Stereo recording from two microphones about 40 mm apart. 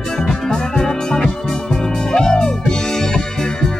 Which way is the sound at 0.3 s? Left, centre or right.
Centre.